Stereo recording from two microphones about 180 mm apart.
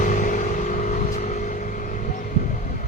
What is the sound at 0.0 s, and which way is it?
Vehicle, 45° left (ahead or behind).